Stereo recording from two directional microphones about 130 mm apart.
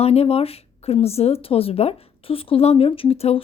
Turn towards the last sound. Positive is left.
turn(degrees=50)  # may be behind; listen again after turning